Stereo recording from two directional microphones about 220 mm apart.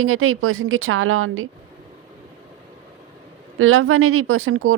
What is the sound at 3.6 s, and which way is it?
Speech, 70° right (ahead or behind).